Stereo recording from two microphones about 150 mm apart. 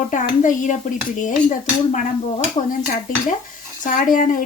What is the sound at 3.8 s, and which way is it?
Speech, 60° left (ahead or behind).